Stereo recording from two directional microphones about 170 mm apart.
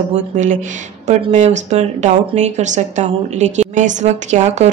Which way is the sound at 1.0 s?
45° right (ahead or behind).